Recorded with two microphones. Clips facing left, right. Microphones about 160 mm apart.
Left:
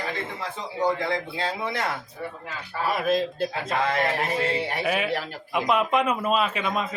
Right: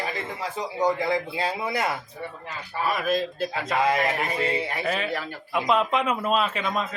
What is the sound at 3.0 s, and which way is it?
Speech, 25° left (ahead or behind).